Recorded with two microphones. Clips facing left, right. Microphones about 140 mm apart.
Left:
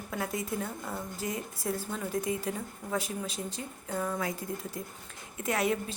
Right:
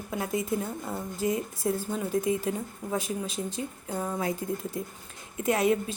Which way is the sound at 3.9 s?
25° right (ahead or behind).